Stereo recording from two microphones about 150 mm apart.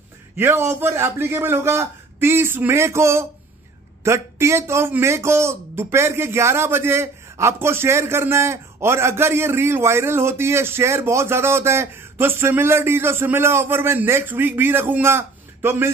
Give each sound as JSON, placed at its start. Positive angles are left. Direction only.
{"t": 0.4, "sound": "a man's voice", "side_deg": -15}